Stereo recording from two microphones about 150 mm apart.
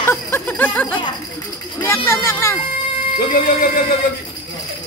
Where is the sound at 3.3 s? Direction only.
80° left.